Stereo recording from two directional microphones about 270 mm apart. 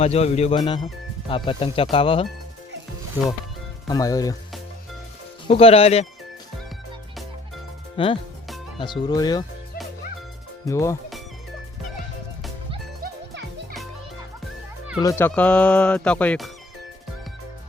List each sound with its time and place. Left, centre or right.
0.0 s speech: left
3.8 s speech: centre
5.5 s speech: left
7.9 s speech: centre
10.7 s speech: centre
14.9 s speech: centre